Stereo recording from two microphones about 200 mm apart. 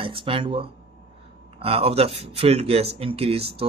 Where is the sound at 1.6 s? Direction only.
30° right (ahead or behind).